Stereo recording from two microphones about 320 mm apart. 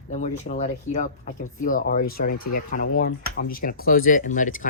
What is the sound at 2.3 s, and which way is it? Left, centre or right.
Speech, left.